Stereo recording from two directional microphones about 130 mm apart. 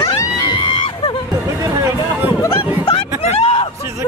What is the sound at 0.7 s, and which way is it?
Music, 40° left (ahead or behind).